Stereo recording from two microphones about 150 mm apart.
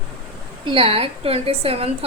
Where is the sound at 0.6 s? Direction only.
40° right (ahead or behind).